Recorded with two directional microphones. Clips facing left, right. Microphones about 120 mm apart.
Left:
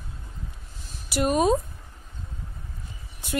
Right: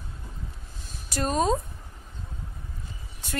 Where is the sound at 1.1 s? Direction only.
10° left (ahead or behind).